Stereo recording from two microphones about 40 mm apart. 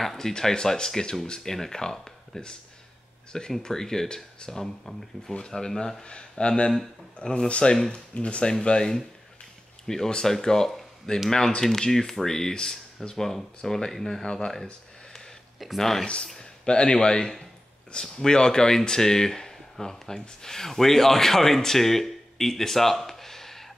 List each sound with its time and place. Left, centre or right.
0.0 s speech: centre
0.3 s speech: centre
3.5 s speech: centre
6.0 s speech: left
8.2 s speech: left
8.5 s speech: centre
14.2 s speech: left
15.8 s speech: centre
16.3 s speech: left; by 23.7 s centre